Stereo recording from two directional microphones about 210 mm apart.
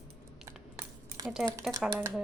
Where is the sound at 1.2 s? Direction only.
20° right (ahead or behind).